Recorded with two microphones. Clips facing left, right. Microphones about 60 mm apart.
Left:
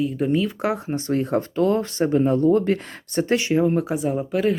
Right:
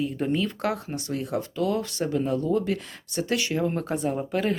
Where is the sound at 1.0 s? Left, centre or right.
Left.